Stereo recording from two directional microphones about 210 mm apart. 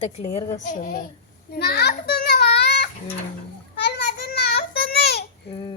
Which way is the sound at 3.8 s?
50° left (ahead or behind).